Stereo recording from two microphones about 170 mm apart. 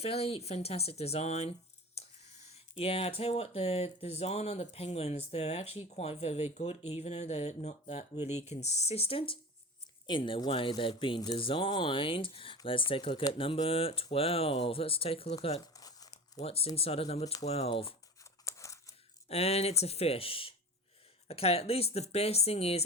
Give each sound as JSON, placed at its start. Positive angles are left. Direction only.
{"t": 0.0, "sound": "speech", "side_deg": 35}
{"t": 15.7, "sound": "crumpling", "side_deg": 20}
{"t": 16.1, "sound": "speech", "side_deg": 40}
{"t": 18.2, "sound": "tearing", "side_deg": 15}
{"t": 19.3, "sound": "speech", "side_deg": 35}